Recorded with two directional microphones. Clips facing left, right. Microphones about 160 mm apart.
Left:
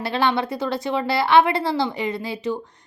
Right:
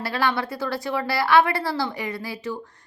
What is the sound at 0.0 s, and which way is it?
A woman's voice, 20° left (ahead or behind).